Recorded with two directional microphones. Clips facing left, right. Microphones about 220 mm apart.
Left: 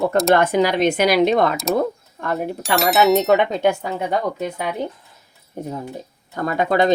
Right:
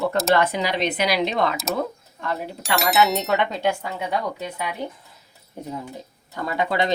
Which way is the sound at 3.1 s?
50° left (ahead or behind).